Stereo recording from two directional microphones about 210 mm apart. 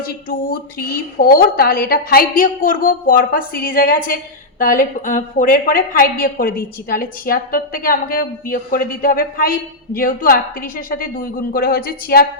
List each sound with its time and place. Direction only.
0.0 s a woman's voice: 45° left (ahead or behind)